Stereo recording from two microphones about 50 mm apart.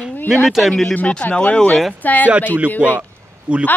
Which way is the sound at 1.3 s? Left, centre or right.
Left.